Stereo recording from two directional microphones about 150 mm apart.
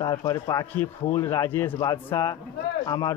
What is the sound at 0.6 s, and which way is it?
Speech, 15° left (ahead or behind).